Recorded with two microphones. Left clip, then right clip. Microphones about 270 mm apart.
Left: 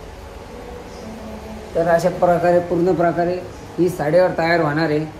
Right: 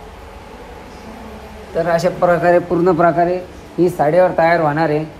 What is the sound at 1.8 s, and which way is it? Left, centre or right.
Speech, right.